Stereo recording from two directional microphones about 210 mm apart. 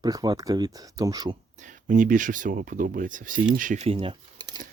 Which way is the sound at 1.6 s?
35° right (ahead or behind).